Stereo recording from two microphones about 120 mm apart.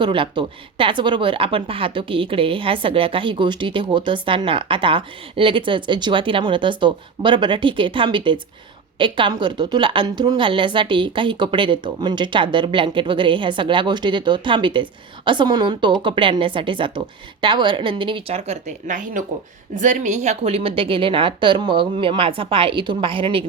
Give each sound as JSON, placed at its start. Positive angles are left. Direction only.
{"t": 0.0, "sound": "a woman's voice", "side_deg": -45}